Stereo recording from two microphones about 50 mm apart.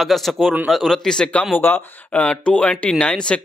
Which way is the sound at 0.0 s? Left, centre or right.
Centre.